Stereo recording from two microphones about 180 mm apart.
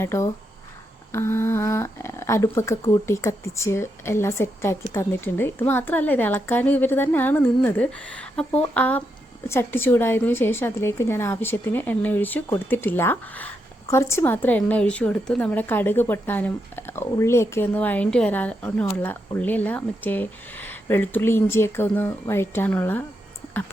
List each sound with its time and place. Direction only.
0.0 s a woman's voice: 15° left (ahead or behind)